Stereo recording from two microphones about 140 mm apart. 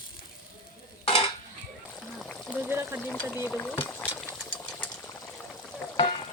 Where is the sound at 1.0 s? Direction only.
40° left (ahead or behind).